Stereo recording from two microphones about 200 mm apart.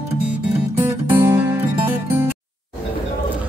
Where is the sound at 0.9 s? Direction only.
10° right (ahead or behind).